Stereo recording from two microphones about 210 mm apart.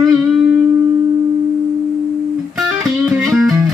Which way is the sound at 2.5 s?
Centre (ahead or behind).